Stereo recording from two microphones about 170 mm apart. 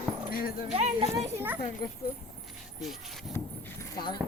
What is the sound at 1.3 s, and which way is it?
Speech, 10° right (ahead or behind).